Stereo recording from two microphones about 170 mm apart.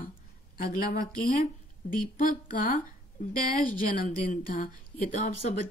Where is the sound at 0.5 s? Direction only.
65° left (ahead or behind).